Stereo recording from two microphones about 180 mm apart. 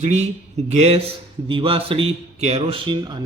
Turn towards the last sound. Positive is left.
turn(degrees=-25)  # may be behind; listen again after turning